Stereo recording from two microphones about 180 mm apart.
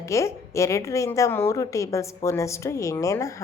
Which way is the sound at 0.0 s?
15° left (ahead or behind).